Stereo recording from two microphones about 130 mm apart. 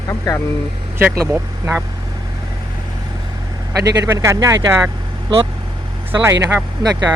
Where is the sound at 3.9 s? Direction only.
25° right (ahead or behind).